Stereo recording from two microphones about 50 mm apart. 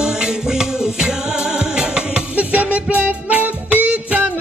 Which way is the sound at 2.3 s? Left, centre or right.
Right.